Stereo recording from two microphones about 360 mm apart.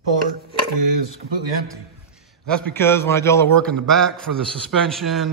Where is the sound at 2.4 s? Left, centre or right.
Centre.